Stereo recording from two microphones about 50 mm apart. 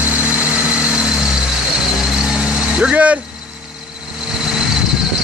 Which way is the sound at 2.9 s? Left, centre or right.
Right.